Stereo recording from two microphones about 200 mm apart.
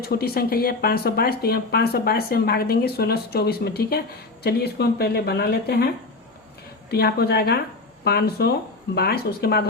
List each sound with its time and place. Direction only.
0.0 s speech: 50° left (ahead or behind)
6.9 s speech: 50° left (ahead or behind)